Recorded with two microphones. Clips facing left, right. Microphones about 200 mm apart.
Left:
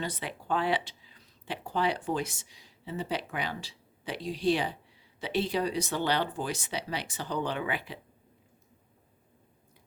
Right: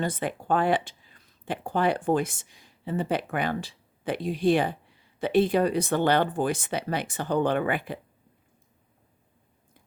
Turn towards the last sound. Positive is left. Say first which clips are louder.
# right 7 dB
turn(degrees=-50)  # may be behind; listen again after turning